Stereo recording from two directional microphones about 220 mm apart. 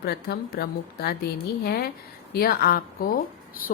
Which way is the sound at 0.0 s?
45° left (ahead or behind).